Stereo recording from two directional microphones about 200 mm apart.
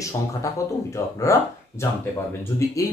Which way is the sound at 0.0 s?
15° left (ahead or behind).